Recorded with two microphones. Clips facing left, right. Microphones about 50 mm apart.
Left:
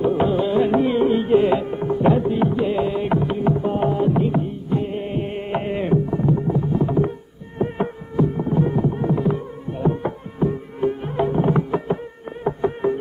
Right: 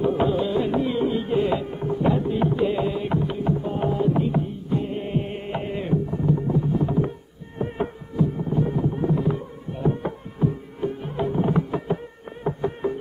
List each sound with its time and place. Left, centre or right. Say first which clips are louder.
0.0 s carnatic music: left 3 dB; centre
7.5 s a sound: left 4 dB; centre
8.2 s music: left 4 dB; left